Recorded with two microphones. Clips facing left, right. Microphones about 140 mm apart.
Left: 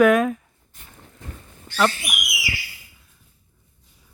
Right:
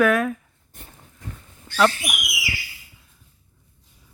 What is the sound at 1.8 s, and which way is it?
Speech, centre (ahead or behind).